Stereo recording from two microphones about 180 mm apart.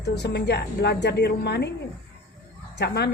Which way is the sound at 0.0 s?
65° left (ahead or behind).